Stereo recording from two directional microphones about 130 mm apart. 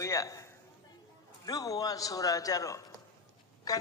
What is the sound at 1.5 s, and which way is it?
A man's voice, 30° left (ahead or behind).